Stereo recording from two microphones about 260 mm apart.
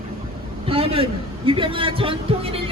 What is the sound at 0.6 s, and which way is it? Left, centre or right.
A man's voice, right.